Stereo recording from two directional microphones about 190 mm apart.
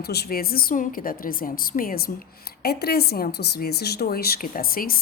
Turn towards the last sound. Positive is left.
turn(degrees=50)  # may be behind; listen again after turning